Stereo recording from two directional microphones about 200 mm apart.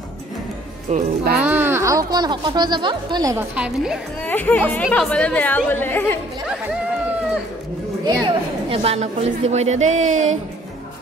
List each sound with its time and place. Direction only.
0.9 s a woman's voice: 45° right (ahead or behind)
1.4 s speech: 10° right (ahead or behind)
3.5 s a woman's voice: 5° right (ahead or behind)
4.3 s speech: 10° left (ahead or behind)
8.0 s a woman's voice: 25° right (ahead or behind)